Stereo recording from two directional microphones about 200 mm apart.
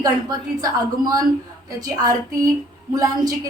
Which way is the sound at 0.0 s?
20° right (ahead or behind).